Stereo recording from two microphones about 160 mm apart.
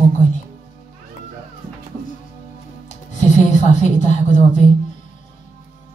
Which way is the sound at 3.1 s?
50° left (ahead or behind).